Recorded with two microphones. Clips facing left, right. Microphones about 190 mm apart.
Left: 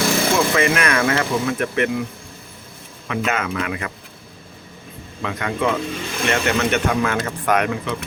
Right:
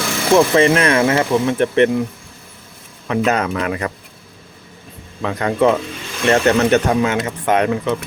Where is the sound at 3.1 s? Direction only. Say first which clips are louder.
Right 5 dB; 40° right (ahead or behind).